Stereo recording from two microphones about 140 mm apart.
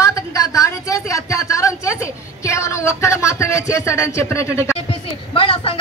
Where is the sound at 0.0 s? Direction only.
25° left (ahead or behind).